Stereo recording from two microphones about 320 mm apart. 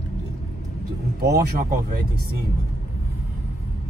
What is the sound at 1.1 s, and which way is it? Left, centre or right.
Speech, right.